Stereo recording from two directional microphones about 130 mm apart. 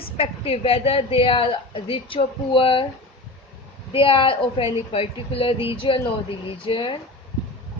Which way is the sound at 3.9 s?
45° left (ahead or behind).